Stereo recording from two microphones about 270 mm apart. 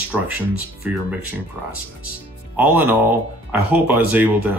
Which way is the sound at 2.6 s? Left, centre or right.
Centre.